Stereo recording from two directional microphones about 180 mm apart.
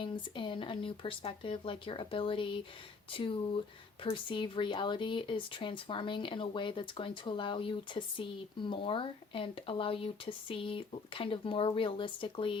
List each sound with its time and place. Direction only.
0.0 s speech: 25° left (ahead or behind)